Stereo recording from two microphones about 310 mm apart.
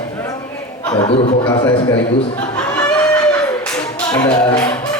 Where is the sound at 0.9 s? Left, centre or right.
Centre.